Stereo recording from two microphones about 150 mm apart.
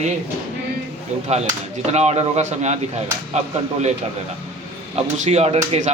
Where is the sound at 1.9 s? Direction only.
45° right (ahead or behind).